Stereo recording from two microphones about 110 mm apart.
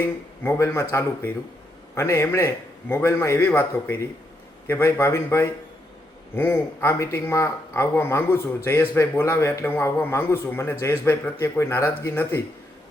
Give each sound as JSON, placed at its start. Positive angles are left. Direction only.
{"t": 0.0, "sound": "speech", "side_deg": 20}